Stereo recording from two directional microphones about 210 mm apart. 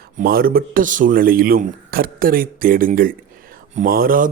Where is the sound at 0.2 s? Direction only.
45° right (ahead or behind).